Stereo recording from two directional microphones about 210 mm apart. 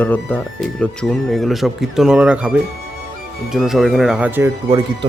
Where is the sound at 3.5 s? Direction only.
Centre (ahead or behind).